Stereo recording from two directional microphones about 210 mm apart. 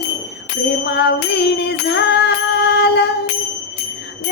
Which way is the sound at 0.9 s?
50° left (ahead or behind).